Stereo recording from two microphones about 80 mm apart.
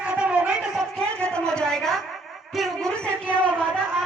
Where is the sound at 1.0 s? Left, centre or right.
Centre.